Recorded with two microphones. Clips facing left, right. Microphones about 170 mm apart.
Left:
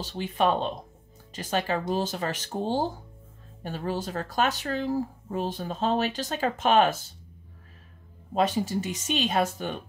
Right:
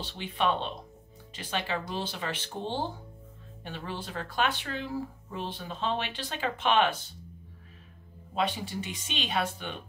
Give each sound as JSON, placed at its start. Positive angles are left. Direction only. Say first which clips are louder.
{"t": 0.0, "sound": "speech", "louder": "left 4 dB", "side_deg": 45}
{"t": 8.4, "sound": "speech", "louder": "left 6 dB", "side_deg": 45}